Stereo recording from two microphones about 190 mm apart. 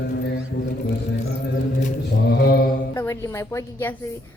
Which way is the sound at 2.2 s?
55° left (ahead or behind).